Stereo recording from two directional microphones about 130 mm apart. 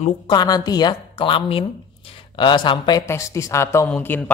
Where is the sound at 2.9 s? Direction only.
25° left (ahead or behind).